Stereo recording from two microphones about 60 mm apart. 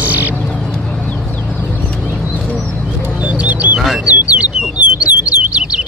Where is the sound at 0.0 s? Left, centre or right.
Right.